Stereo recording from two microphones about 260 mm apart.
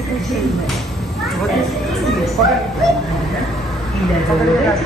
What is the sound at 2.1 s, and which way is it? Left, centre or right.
Speech, centre.